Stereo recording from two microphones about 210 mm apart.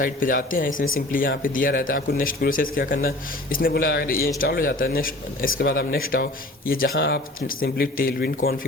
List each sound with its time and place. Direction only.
0.0 s speech: 40° left (ahead or behind)